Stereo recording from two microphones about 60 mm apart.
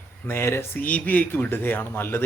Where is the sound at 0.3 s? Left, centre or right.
Left.